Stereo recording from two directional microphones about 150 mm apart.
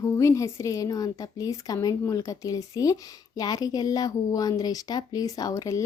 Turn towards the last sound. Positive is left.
turn(degrees=20)  # may be behind; listen again after turning